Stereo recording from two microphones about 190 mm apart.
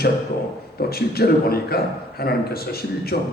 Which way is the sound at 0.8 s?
55° left (ahead or behind).